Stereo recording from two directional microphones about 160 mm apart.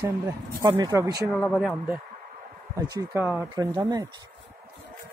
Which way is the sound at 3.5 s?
25° right (ahead or behind).